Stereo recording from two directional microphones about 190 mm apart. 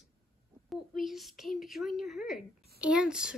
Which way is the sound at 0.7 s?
Centre (ahead or behind).